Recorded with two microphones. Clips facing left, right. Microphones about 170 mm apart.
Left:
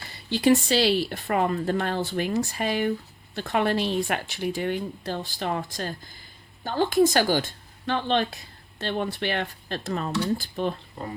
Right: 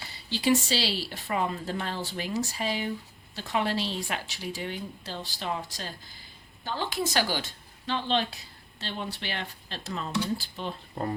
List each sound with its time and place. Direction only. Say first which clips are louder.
0.1 s speech: left 5 dB; 55° left (ahead or behind)